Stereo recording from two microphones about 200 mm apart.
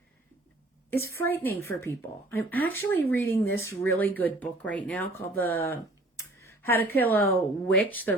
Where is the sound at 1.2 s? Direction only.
10° left (ahead or behind).